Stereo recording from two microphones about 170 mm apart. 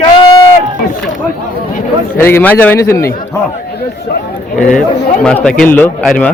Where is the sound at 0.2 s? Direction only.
20° left (ahead or behind).